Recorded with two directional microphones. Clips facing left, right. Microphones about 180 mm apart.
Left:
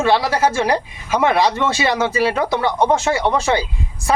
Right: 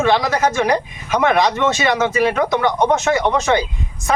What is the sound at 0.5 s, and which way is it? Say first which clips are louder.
Speech: right 1 dB; 30° left (ahead or behind).